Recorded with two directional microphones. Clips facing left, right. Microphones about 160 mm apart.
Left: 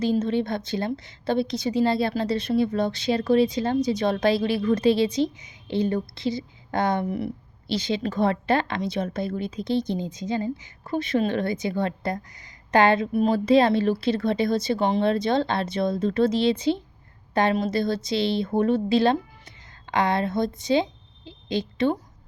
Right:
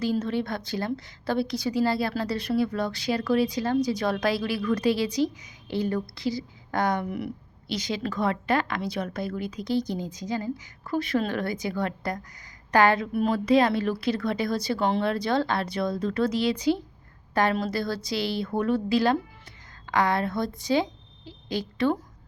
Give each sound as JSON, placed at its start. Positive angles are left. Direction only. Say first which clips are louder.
{"t": 0.0, "sound": "a woman's voice", "louder": "left 3 dB", "side_deg": 20}